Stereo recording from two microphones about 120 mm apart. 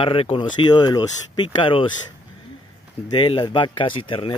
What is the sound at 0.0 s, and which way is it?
Speech, 50° left (ahead or behind).